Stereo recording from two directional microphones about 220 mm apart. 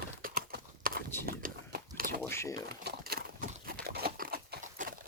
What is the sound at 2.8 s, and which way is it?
Horse, 45° right (ahead or behind).